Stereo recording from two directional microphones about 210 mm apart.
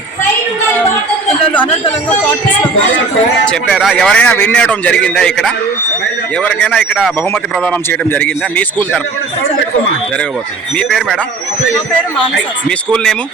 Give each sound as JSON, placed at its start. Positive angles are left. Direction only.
{"t": 1.5, "sound": "a man's voice", "side_deg": 5}
{"t": 3.4, "sound": "a man's voice", "side_deg": 5}
{"t": 10.8, "sound": "a man's voice", "side_deg": 0}
{"t": 12.6, "sound": "a man's voice", "side_deg": 5}